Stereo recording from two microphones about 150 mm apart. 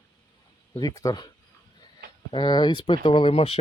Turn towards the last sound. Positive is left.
turn(degrees=40)  # may be behind; listen again after turning